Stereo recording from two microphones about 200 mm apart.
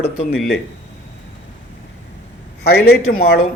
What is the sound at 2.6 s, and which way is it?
Speech, 50° left (ahead or behind).